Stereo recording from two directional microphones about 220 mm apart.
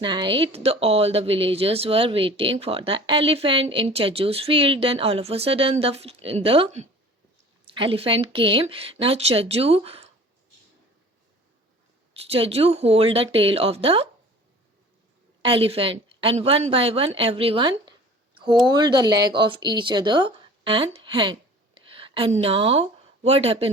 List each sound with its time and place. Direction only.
0.0 s speech: 20° right (ahead or behind)
12.1 s speech: 25° right (ahead or behind)
15.4 s a woman's voice: 25° right (ahead or behind)